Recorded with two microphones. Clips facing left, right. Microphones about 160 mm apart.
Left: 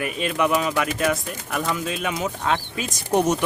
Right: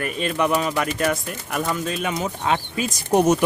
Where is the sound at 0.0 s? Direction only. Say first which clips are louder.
Even; 5° left (ahead or behind).